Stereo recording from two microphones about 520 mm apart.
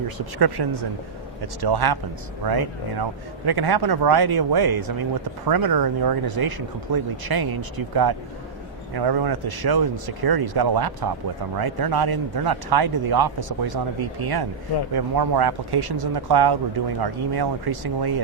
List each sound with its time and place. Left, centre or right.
0.3 s a man's voice: right